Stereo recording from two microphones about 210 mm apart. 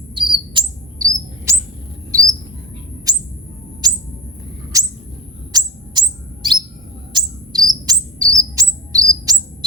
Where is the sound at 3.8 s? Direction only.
20° right (ahead or behind).